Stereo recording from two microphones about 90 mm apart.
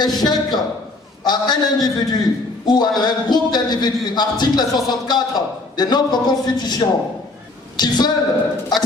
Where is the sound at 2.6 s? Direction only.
50° left (ahead or behind).